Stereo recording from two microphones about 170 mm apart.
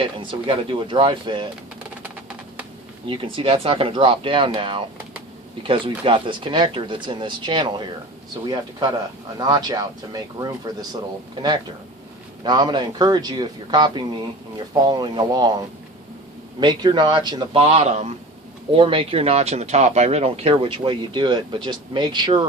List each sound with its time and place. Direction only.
0.0 s speech: 30° right (ahead or behind)
3.1 s speech: 30° right (ahead or behind)
12.4 s speech: 25° right (ahead or behind)
16.6 s speech: 25° right (ahead or behind)